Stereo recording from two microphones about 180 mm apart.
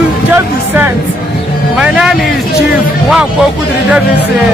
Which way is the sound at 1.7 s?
5° right (ahead or behind).